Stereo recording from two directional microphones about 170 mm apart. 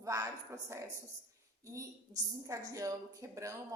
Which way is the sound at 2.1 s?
25° right (ahead or behind).